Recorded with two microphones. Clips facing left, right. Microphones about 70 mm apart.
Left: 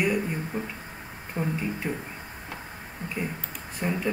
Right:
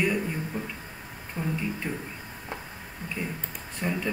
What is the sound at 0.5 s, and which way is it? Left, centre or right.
Speech, left.